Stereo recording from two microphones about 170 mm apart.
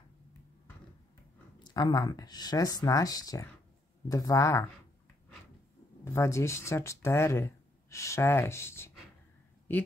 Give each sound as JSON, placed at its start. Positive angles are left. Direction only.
{"t": 1.6, "sound": "speech", "side_deg": 25}
{"t": 6.0, "sound": "speech", "side_deg": 15}